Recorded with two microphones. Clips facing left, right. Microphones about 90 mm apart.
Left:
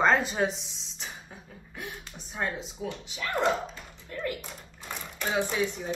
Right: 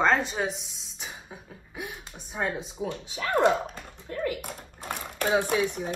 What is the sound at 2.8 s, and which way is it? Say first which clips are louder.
Speech: right 3 dB; 25° right (ahead or behind).